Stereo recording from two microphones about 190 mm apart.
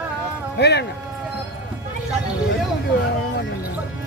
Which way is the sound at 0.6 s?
60° left (ahead or behind).